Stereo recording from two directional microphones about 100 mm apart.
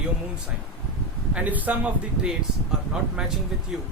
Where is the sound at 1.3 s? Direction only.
15° right (ahead or behind).